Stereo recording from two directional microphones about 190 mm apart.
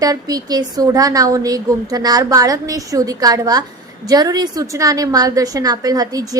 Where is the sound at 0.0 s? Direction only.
20° right (ahead or behind).